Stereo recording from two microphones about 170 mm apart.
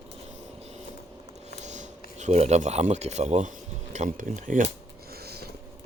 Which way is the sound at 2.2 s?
40° right (ahead or behind).